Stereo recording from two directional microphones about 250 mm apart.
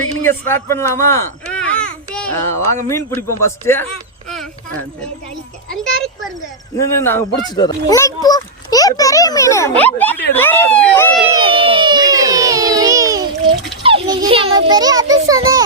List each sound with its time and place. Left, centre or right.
0.3 s babbling: centre
2.9 s a child's voice: centre
5.7 s a child's voice: centre
11.3 s a sound: right